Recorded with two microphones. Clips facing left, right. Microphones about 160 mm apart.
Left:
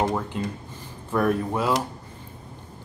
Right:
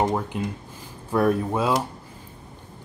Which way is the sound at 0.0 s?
20° right (ahead or behind).